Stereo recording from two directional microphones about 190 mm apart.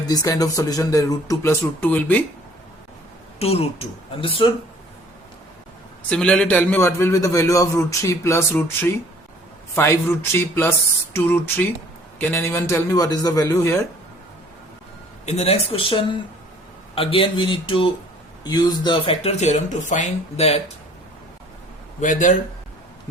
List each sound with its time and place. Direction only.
0.1 s a man's voice: 20° left (ahead or behind)
3.3 s speech: 30° left (ahead or behind)
6.1 s a man's voice: 5° left (ahead or behind)
10.3 s a man's voice: 10° left (ahead or behind)
15.3 s speech: 35° left (ahead or behind)
22.0 s speech: 40° left (ahead or behind)